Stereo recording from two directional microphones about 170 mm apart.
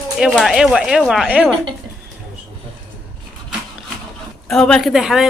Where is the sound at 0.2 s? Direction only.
Centre (ahead or behind).